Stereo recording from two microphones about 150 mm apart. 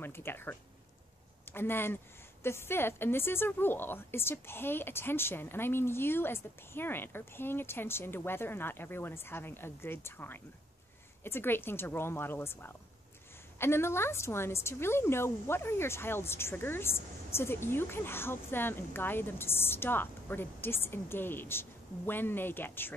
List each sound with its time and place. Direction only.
0.0 s a woman's voice: 15° left (ahead or behind)